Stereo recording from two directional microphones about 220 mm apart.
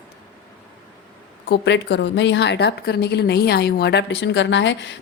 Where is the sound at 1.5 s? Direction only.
50° left (ahead or behind).